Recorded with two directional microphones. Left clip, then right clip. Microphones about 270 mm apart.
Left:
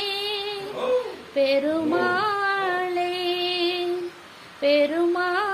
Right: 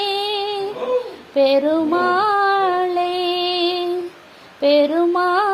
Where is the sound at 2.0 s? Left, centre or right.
Right.